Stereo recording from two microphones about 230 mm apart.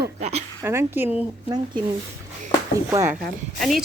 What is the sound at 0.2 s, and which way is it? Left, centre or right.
Speech, right.